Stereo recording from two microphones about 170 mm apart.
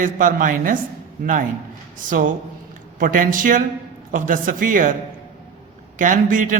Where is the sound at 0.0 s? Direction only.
50° right (ahead or behind).